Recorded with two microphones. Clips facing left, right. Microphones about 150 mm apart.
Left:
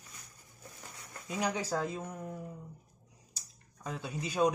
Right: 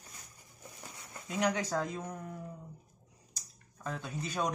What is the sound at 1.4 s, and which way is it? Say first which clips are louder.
Speech: right 1 dB; 5° left (ahead or behind).